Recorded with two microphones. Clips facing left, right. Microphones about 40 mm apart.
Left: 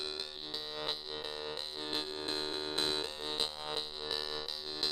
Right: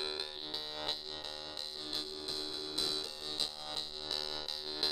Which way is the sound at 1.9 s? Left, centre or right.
Left.